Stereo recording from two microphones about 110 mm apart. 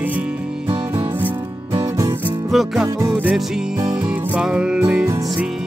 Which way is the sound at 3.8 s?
40° right (ahead or behind).